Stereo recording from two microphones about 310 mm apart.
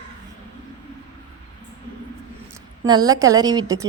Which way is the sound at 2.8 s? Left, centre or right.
Centre.